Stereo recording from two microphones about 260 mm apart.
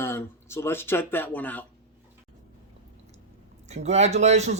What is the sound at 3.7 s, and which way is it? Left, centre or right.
Speech, right.